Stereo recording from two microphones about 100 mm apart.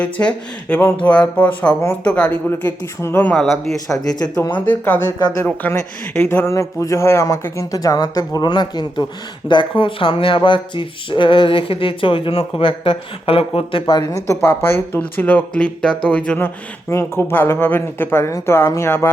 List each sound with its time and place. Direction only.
0.0 s speech: 10° left (ahead or behind)
3.3 s speech: centre (ahead or behind)
3.9 s a man's voice: 40° left (ahead or behind)
4.5 s a man's voice: 15° left (ahead or behind); by 13.9 s 60° left (ahead or behind)
14.3 s speech: 20° left (ahead or behind)
16.9 s speech: 25° left (ahead or behind)